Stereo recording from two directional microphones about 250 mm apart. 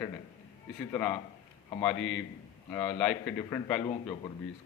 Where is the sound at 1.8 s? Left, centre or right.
Centre.